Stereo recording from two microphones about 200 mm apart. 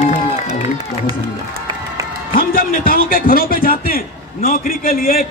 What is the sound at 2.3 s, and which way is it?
A man's voice, 45° left (ahead or behind).